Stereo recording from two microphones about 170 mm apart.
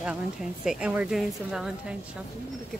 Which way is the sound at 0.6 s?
5° right (ahead or behind).